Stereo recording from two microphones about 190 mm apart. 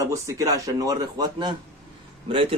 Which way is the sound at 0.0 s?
15° right (ahead or behind).